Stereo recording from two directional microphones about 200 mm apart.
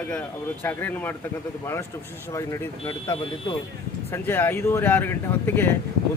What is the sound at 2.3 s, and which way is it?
Speech, 15° left (ahead or behind).